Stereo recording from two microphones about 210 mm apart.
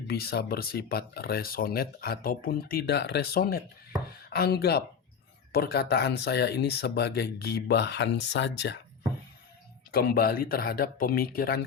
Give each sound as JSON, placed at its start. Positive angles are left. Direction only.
{"t": 0.1, "sound": "speech", "side_deg": 50}
{"t": 9.9, "sound": "speech", "side_deg": 45}